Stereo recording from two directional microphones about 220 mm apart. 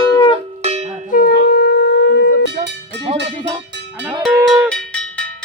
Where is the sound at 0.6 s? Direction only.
30° right (ahead or behind).